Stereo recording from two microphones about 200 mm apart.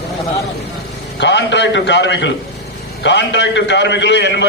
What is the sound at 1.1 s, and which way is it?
A man's voice, 60° left (ahead or behind).